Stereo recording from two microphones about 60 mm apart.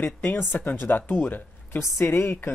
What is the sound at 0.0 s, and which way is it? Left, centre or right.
A woman's voice, left.